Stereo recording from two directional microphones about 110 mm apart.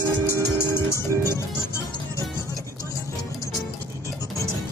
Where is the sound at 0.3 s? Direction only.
20° left (ahead or behind).